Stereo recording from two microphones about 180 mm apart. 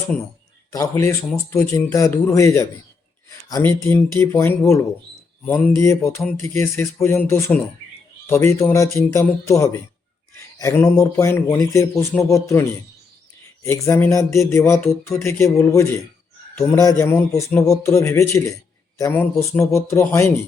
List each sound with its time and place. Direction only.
0.7 s a man's voice: 15° left (ahead or behind)
13.7 s a man's voice: 15° left (ahead or behind)